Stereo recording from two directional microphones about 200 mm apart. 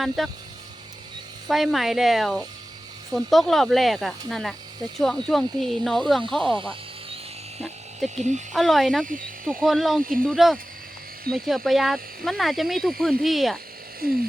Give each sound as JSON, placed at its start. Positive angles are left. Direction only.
{"t": 0.2, "sound": "speech", "side_deg": 0}
{"t": 1.5, "sound": "speech", "side_deg": 0}
{"t": 6.5, "sound": "snake", "side_deg": -25}
{"t": 8.1, "sound": "speech", "side_deg": -35}
{"t": 8.5, "sound": "speech", "side_deg": 0}
{"t": 9.0, "sound": "speech", "side_deg": -45}
{"t": 9.5, "sound": "speech", "side_deg": 0}
{"t": 10.0, "sound": "speech", "side_deg": -45}
{"t": 10.2, "sound": "speech", "side_deg": 0}
{"t": 14.0, "sound": "speech", "side_deg": -45}